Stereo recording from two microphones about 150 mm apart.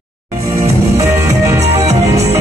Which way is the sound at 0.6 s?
20° right (ahead or behind).